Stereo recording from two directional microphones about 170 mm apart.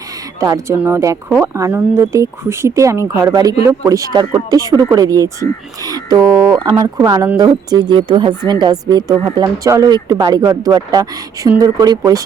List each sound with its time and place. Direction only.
0.3 s speech: 20° right (ahead or behind)